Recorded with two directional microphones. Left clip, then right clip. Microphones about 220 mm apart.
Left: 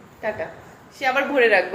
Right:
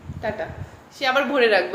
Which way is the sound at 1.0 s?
20° right (ahead or behind).